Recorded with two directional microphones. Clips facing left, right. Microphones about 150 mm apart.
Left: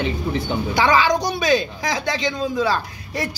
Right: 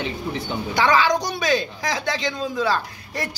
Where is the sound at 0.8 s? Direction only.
10° left (ahead or behind).